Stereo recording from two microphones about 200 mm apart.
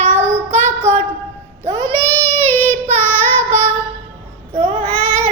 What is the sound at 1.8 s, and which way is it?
Child singing, 10° left (ahead or behind).